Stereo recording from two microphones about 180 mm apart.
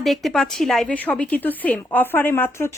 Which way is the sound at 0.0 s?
Centre (ahead or behind).